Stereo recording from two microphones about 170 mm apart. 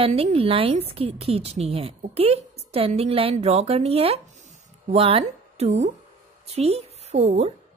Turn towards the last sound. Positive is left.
turn(degrees=-40)  # may be behind; listen again after turning